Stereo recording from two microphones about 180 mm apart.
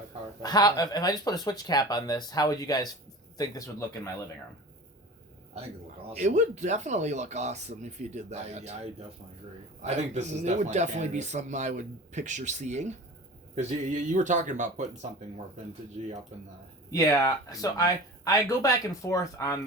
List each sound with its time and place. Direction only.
0.4 s speech: 20° left (ahead or behind)
6.1 s speech: 40° right (ahead or behind)
16.9 s speech: 20° left (ahead or behind)